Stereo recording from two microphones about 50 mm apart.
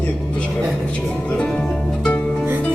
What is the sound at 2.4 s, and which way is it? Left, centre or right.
Music, right.